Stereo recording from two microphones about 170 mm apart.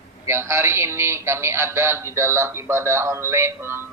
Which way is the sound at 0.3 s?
15° right (ahead or behind).